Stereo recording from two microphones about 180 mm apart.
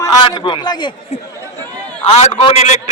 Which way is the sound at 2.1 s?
35° left (ahead or behind).